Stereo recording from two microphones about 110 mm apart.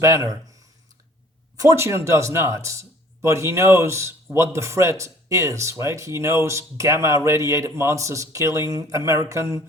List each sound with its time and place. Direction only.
0.0 s speech: 25° right (ahead or behind)
1.5 s speech: 30° right (ahead or behind)